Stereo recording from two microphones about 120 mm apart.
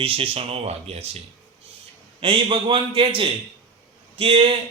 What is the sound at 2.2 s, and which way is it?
Speech, 45° right (ahead or behind).